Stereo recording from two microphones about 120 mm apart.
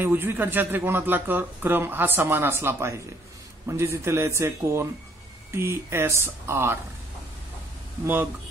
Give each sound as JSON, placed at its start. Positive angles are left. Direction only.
{"t": 0.0, "sound": "speech", "side_deg": -15}